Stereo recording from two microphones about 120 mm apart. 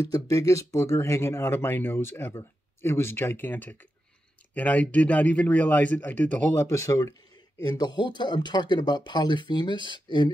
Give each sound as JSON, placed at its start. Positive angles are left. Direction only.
{"t": 0.1, "sound": "speech", "side_deg": 30}
{"t": 7.6, "sound": "speech", "side_deg": 35}